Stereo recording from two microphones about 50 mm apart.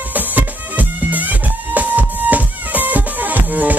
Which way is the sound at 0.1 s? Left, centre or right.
Right.